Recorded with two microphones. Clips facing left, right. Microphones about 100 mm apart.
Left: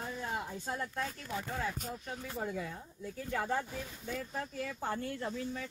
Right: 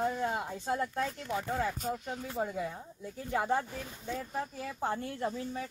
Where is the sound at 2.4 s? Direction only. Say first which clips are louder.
Right 5 dB; 20° right (ahead or behind).